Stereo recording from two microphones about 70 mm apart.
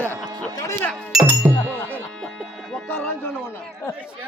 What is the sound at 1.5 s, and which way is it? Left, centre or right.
Music, centre.